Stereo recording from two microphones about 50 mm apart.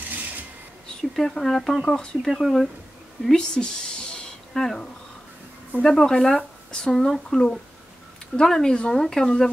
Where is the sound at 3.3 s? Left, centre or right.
Centre.